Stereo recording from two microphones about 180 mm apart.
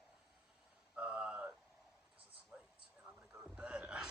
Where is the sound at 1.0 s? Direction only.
5° right (ahead or behind).